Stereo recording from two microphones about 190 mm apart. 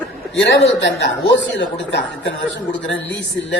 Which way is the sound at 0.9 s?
70° left (ahead or behind).